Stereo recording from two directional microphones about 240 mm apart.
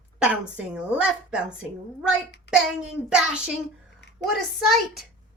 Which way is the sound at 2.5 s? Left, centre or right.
Left.